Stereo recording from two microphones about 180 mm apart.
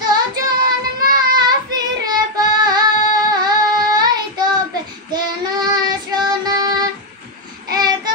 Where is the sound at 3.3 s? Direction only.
20° right (ahead or behind).